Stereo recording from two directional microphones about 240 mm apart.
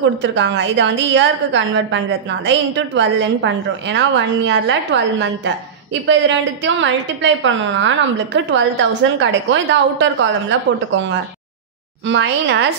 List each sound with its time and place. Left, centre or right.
0.2 s a woman's voice: right